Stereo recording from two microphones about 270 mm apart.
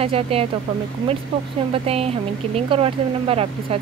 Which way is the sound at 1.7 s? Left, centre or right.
Right.